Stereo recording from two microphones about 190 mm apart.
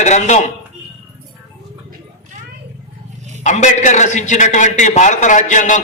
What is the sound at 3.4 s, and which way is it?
A man's voice, 40° left (ahead or behind).